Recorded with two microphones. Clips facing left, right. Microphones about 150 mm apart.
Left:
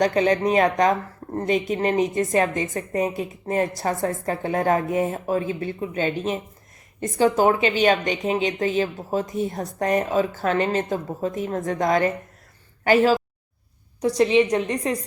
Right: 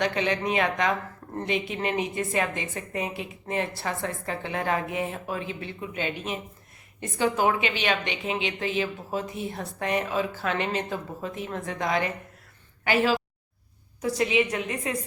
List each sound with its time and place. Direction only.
0.0 s a woman's voice: 40° left (ahead or behind)